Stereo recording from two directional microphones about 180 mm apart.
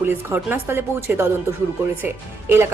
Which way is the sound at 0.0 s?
10° right (ahead or behind).